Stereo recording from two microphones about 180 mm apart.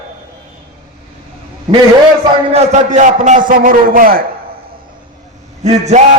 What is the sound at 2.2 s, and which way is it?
A man's voice, 35° right (ahead or behind).